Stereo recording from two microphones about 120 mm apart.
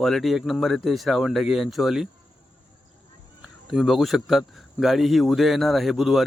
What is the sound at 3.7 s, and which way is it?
Speech, centre (ahead or behind).